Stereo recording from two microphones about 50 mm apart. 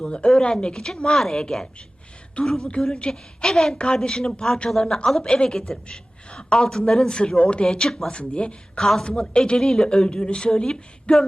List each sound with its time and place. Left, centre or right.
0.0 s a woman's voice: left
8.8 s a woman's voice: centre